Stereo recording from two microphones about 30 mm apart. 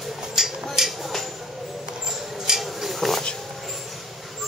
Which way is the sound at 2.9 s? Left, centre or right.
Centre.